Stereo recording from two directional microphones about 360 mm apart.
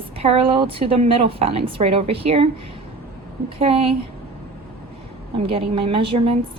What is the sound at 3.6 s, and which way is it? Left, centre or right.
Speech, centre.